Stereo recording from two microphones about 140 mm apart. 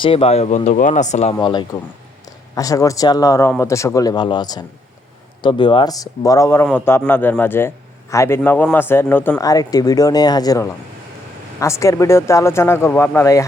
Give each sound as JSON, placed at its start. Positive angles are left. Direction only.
{"t": 0.0, "sound": "speech", "side_deg": 40}
{"t": 1.4, "sound": "a man's voice", "side_deg": 35}
{"t": 9.4, "sound": "speech", "side_deg": 25}